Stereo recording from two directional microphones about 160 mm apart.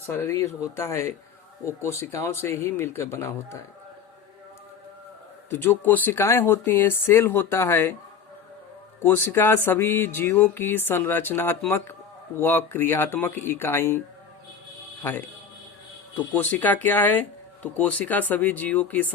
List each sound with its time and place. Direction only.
0.2 s speech: 20° left (ahead or behind)
5.5 s speech: 10° left (ahead or behind)
9.0 s speech: 15° left (ahead or behind)
16.1 s speech: 10° left (ahead or behind)